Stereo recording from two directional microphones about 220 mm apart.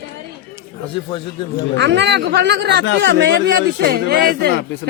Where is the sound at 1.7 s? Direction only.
50° right (ahead or behind).